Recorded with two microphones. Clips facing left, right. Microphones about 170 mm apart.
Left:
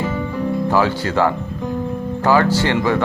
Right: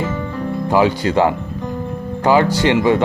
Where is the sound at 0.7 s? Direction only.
15° right (ahead or behind).